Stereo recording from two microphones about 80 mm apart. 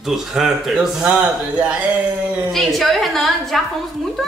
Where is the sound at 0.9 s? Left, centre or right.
Centre.